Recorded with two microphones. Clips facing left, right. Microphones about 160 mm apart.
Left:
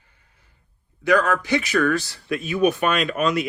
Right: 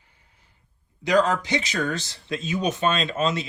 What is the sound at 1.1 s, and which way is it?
Speech, 20° right (ahead or behind).